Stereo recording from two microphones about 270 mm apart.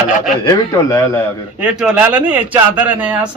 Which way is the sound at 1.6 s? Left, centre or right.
Centre.